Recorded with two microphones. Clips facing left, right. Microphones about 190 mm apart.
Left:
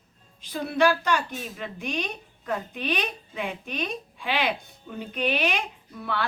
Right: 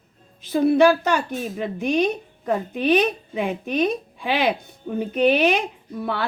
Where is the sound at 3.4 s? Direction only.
40° right (ahead or behind).